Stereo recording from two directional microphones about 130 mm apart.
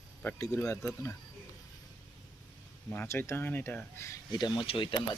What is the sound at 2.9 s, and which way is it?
Speech, 15° left (ahead or behind).